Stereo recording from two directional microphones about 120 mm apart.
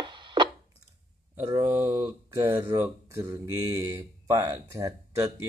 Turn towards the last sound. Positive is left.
turn(degrees=-25)  # may be behind; listen again after turning